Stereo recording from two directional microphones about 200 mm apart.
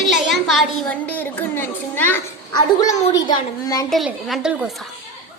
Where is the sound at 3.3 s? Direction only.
20° left (ahead or behind).